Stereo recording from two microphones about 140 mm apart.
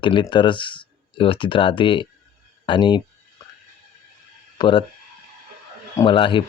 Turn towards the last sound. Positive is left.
turn(degrees=35)  # may be behind; listen again after turning